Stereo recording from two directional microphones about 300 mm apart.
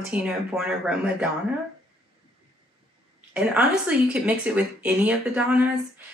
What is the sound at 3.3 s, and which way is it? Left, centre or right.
Speech, centre.